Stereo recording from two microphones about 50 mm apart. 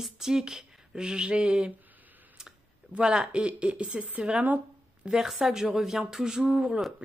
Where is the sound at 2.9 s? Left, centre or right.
Centre.